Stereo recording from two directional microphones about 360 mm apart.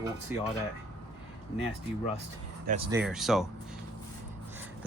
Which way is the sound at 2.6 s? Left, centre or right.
Centre.